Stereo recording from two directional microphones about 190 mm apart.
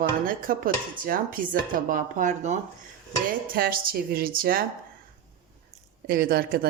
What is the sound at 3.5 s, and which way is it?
Speech, 50° right (ahead or behind).